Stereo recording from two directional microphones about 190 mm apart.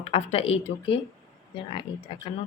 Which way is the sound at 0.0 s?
35° left (ahead or behind).